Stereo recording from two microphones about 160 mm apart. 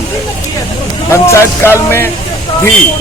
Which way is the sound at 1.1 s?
15° left (ahead or behind).